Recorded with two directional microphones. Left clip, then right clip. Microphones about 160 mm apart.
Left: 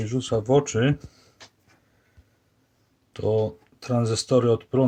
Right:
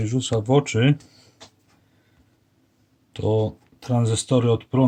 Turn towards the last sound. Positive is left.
turn(degrees=10)  # may be behind; listen again after turning